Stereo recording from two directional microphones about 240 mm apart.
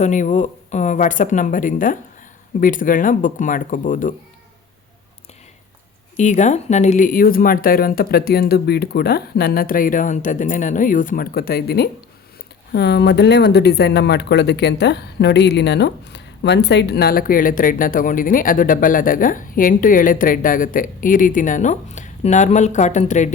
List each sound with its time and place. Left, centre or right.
0.0 s speech: left
6.1 s speech: left